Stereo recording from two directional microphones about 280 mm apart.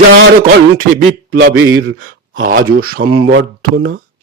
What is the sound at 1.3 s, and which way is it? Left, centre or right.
Speech, right.